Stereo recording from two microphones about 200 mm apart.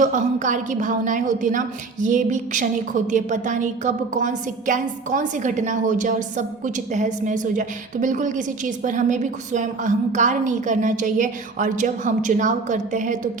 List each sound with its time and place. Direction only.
0.0 s a woman's voice: 40° right (ahead or behind)